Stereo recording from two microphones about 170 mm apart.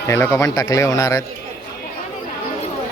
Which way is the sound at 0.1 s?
15° left (ahead or behind).